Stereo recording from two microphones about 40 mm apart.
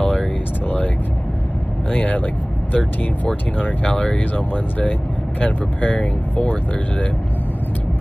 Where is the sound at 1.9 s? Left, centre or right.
Left.